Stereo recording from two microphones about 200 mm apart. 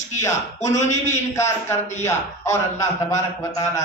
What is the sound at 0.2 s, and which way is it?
Speech, 15° left (ahead or behind).